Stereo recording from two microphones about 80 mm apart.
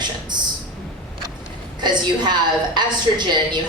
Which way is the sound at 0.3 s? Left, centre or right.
Right.